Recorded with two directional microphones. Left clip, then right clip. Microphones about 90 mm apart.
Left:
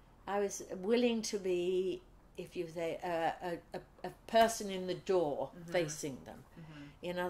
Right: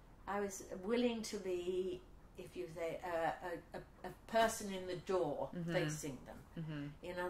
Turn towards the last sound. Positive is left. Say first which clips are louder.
# left 5 dB
turn(degrees=35)  # may be behind; listen again after turning